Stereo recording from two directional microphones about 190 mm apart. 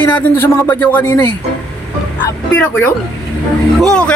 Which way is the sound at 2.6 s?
10° left (ahead or behind).